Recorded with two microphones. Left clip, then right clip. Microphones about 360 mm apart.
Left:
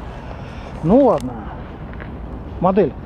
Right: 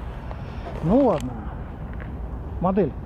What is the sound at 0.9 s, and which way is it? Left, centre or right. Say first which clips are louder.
Speech: left 6 dB; centre.